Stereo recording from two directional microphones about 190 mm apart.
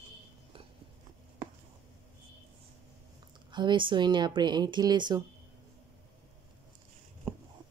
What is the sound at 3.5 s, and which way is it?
Speech, 25° right (ahead or behind).